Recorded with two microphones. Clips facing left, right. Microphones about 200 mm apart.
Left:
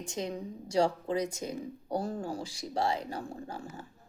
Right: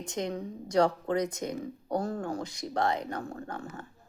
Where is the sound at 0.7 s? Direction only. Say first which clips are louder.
Right 2 dB; 30° left (ahead or behind).